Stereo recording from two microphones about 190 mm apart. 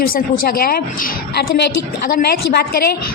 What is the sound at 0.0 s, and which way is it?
A woman's voice, 50° left (ahead or behind).